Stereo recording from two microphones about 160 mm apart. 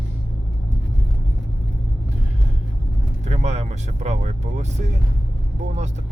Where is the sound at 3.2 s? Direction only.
45° right (ahead or behind).